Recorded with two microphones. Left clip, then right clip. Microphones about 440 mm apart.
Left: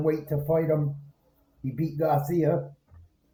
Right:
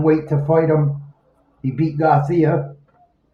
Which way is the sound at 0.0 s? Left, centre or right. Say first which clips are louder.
Right 10 dB; left.